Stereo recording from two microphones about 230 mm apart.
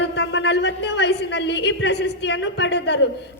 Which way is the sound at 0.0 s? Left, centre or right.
Left.